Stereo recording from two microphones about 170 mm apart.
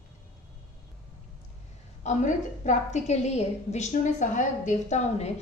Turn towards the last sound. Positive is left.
turn(degrees=40)  # may be behind; listen again after turning